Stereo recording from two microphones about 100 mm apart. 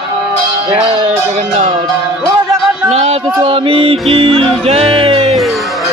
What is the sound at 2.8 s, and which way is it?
Music, 90° right.